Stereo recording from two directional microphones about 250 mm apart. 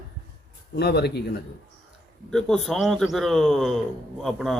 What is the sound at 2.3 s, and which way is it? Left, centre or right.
A man's voice, centre.